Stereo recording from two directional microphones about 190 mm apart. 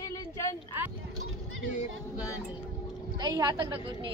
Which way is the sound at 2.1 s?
15° left (ahead or behind).